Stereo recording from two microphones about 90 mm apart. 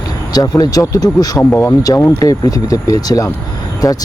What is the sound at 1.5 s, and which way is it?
Speech, 30° left (ahead or behind).